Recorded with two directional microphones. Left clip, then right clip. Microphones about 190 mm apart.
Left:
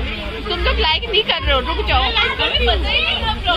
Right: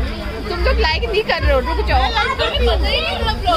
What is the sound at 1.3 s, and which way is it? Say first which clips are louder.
Speech: even; 10° right (ahead or behind).